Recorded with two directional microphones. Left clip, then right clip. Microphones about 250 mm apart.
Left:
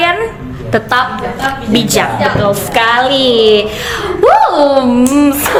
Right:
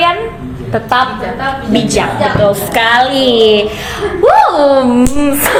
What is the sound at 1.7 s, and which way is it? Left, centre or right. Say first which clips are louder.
A woman's voice: left 1 dB; centre.